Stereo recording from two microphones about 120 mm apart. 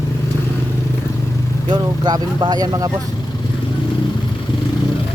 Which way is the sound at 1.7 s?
40° right (ahead or behind).